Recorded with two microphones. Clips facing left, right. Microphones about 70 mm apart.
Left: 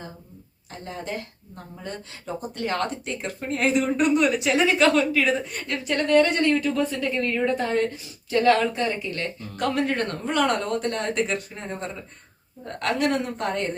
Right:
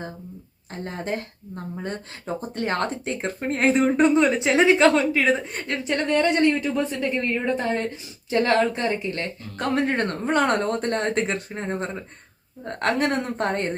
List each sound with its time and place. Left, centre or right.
0.7 s speech: right